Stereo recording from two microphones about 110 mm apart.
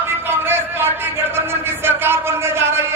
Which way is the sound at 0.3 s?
20° right (ahead or behind).